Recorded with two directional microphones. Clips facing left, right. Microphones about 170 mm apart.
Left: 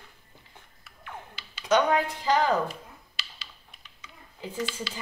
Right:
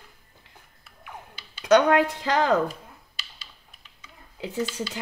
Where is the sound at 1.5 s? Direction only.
75° right (ahead or behind); by 2.6 s 90° right.